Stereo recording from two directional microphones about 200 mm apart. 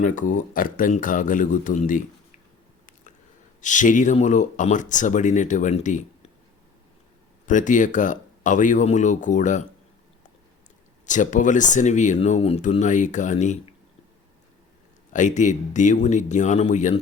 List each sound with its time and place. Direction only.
0.0 s speech: 40° left (ahead or behind)
3.6 s speech: 40° left (ahead or behind)
7.4 s speech: 40° left (ahead or behind)
11.0 s speech: 40° left (ahead or behind)
15.1 s speech: 35° left (ahead or behind)